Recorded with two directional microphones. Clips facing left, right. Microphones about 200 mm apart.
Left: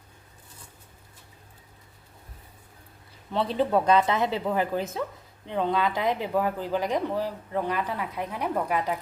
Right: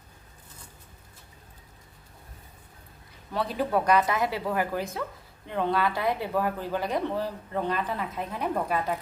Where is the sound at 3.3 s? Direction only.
25° left (ahead or behind).